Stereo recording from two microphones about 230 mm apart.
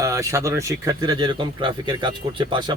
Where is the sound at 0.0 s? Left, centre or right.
Centre.